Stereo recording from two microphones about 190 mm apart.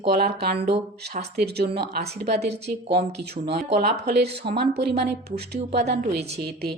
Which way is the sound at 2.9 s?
60° right (ahead or behind).